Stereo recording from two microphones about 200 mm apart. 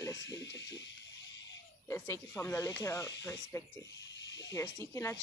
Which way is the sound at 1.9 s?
10° left (ahead or behind).